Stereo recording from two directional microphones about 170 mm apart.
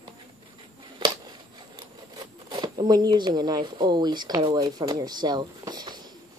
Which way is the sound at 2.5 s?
25° right (ahead or behind).